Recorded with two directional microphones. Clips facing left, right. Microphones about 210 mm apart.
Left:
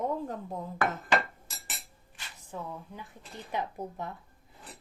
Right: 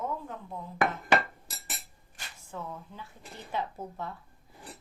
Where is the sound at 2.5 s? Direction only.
15° left (ahead or behind).